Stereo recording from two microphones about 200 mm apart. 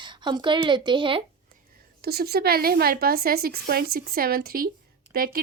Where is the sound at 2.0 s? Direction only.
50° right (ahead or behind).